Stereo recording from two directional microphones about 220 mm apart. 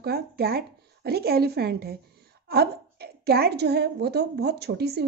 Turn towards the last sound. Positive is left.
turn(degrees=-45)  # may be behind; listen again after turning